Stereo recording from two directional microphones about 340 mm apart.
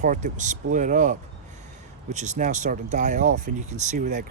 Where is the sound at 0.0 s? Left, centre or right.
Right.